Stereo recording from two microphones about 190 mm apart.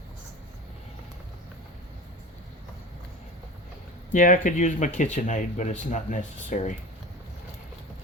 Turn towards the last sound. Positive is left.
turn(degrees=40)  # may be behind; listen again after turning